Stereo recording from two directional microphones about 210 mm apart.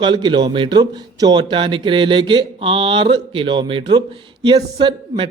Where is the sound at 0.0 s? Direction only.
20° right (ahead or behind).